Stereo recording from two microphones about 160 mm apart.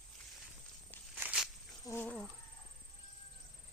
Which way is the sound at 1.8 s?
15° left (ahead or behind).